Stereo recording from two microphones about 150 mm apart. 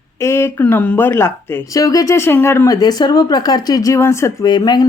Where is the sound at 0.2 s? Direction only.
20° left (ahead or behind).